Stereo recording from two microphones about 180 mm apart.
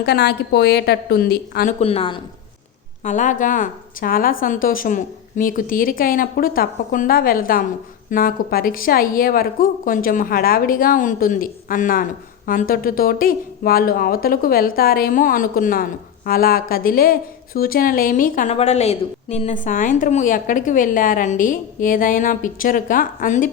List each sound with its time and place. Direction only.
0.0 s a woman's voice: 65° left (ahead or behind)
1.8 s a woman's voice: 35° left (ahead or behind)
3.0 s a woman's voice: 45° left (ahead or behind)
18.5 s a woman's voice: 35° left (ahead or behind)
19.6 s a woman's voice: 45° left (ahead or behind)